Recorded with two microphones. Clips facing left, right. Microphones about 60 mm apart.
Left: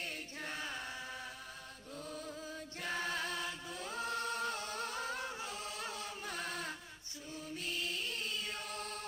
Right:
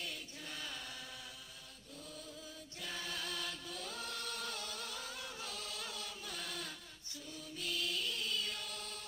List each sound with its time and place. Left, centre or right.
0.0 s chant: left
2.0 s music: left
2.8 s chant: left
7.3 s mantra: left